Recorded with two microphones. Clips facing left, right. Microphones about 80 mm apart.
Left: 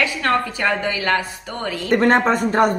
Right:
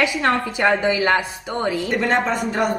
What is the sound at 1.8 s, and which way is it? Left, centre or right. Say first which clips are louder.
Speech: left 8 dB; left.